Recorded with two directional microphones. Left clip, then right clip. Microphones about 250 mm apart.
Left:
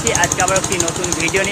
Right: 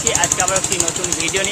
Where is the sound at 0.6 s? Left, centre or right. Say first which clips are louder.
Left 2 dB; centre.